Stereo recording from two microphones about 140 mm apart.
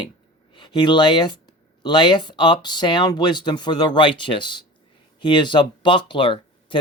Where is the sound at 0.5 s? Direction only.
35° left (ahead or behind).